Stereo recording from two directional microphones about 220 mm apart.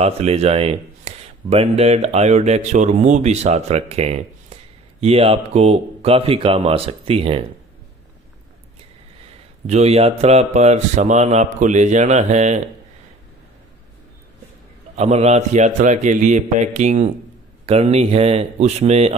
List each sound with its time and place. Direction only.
0.0 s speech: 30° right (ahead or behind)
9.7 s speech: 30° right (ahead or behind)
15.0 s speech: 30° right (ahead or behind)